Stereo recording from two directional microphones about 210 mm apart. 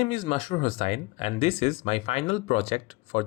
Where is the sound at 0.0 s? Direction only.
25° left (ahead or behind).